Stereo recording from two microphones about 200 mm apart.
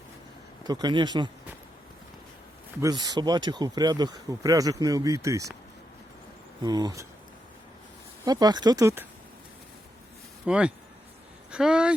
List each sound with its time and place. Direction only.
0.6 s speech: 20° right (ahead or behind)
2.8 s speech: 20° right (ahead or behind)
6.6 s speech: 20° right (ahead or behind)
8.2 s speech: 20° right (ahead or behind)
10.4 s speech: 5° right (ahead or behind)